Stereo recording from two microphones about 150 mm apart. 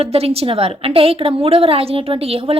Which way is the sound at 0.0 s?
40° right (ahead or behind).